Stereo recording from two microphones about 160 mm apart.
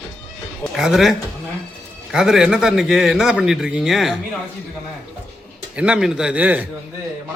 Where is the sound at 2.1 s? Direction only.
5° right (ahead or behind).